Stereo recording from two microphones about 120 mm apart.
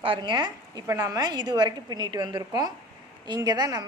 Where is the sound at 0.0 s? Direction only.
45° right (ahead or behind).